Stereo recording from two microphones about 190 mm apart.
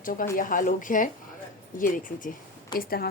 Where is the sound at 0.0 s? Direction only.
45° left (ahead or behind).